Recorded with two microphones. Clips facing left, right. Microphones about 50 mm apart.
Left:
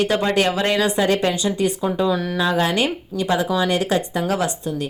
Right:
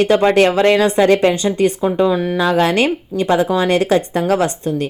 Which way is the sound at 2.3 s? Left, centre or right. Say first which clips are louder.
Right 5 dB; right.